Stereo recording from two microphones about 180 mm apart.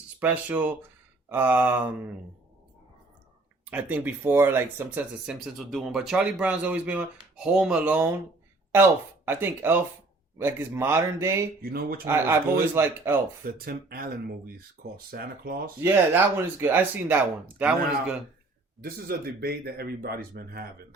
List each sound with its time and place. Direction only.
0.2 s speech: 10° right (ahead or behind)
3.7 s speech: 10° right (ahead or behind)
9.2 s speech: 10° right (ahead or behind)
11.6 s speech: 55° right (ahead or behind)
12.0 s speech: 15° right (ahead or behind)
13.4 s speech: 55° right (ahead or behind)
15.8 s speech: 10° right (ahead or behind)
18.8 s speech: 55° right (ahead or behind)